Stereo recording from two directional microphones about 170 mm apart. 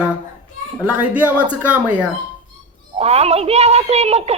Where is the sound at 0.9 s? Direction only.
10° right (ahead or behind).